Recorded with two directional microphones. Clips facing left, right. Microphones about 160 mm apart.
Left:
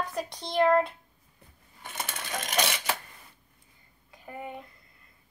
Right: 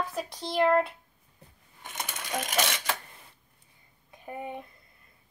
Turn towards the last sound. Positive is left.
turn(degrees=-20)  # may be behind; listen again after turning